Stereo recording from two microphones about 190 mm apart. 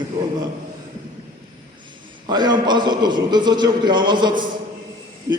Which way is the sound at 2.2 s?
20° right (ahead or behind).